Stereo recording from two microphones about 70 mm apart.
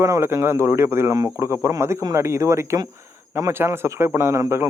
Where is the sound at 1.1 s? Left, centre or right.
Right.